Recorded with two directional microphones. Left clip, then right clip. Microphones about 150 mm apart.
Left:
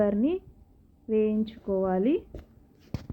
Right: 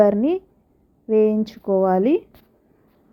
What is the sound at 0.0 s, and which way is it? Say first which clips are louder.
A woman's voice: right 9 dB; 30° right (ahead or behind).